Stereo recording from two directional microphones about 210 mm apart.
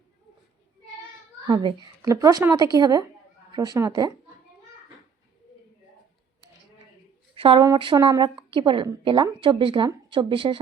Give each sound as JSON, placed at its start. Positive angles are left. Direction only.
{"t": 1.5, "sound": "a woman's voice", "side_deg": -20}
{"t": 7.3, "sound": "a woman's voice", "side_deg": -25}